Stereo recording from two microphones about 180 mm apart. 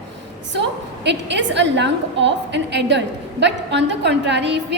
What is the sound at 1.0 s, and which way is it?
A woman's voice, 75° right (ahead or behind).